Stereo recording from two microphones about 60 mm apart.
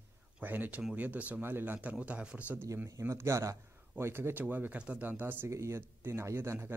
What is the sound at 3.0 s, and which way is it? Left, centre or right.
Speech, right.